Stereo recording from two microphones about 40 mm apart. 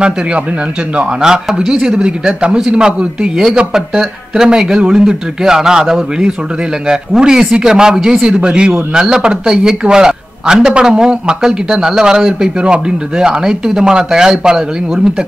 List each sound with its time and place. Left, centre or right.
1.2 s speech: centre
4.5 s a man's voice: centre